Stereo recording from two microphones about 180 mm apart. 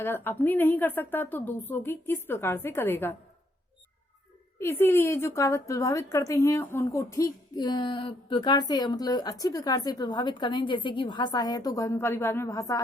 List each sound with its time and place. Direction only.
0.0 s a woman's voice: 10° left (ahead or behind)
4.6 s a woman's voice: 10° left (ahead or behind)